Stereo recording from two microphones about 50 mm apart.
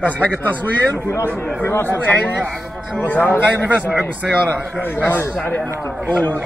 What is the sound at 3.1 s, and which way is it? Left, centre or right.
Speech, left.